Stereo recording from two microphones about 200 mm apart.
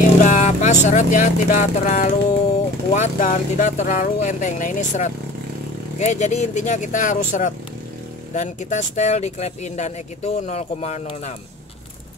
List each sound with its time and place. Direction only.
0.2 s speech: 35° left (ahead or behind)